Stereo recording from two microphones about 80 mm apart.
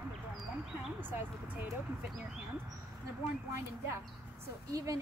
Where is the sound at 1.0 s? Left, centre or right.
Right.